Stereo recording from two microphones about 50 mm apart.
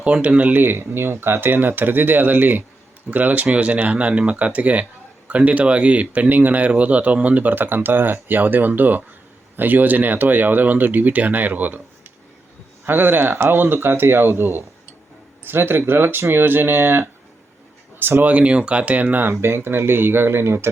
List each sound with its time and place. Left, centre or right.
0.0 s speech: right
0.6 s speech: right
12.8 s speech: right
18.3 s speech: right